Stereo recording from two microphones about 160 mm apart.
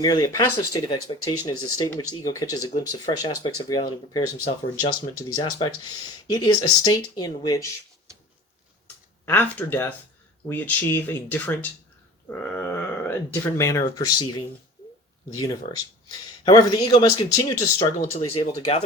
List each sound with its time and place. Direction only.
0.0 s speech: 25° left (ahead or behind)
5.4 s speech: 30° left (ahead or behind)
9.2 s speech: 10° left (ahead or behind)
15.6 s speech: 40° left (ahead or behind)
16.5 s speech: 25° left (ahead or behind)
18.3 s speech: 35° left (ahead or behind)